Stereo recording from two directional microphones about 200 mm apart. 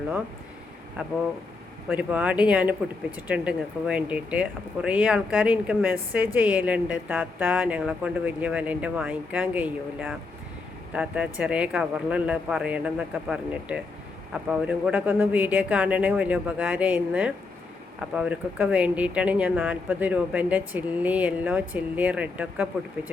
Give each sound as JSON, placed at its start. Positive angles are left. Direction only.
{"t": 1.9, "sound": "speech", "side_deg": -10}